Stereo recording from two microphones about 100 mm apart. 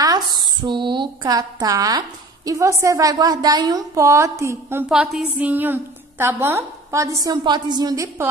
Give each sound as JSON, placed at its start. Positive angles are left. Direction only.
{"t": 0.0, "sound": "a woman's voice", "side_deg": -40}
{"t": 4.8, "sound": "a woman's voice", "side_deg": -5}
{"t": 7.2, "sound": "a woman's voice", "side_deg": -45}